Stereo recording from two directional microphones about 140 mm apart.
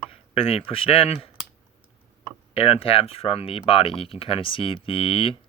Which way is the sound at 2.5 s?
40° left (ahead or behind).